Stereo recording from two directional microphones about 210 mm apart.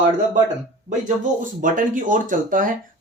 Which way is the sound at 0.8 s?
35° right (ahead or behind).